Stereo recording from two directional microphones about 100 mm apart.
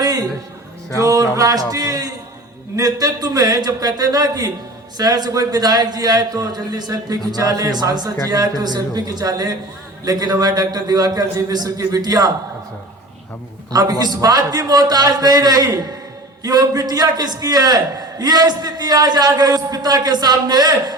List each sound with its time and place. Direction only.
0.0 s a sound: 40° right (ahead or behind)
0.9 s a man's voice: 35° right (ahead or behind)
13.7 s a man's voice: 40° right (ahead or behind)